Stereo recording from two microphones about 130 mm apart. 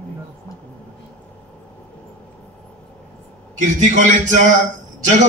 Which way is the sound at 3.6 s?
75° right (ahead or behind).